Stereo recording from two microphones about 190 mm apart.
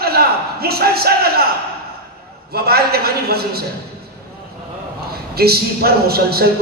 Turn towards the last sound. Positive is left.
turn(degrees=-55)  # may be behind; listen again after turning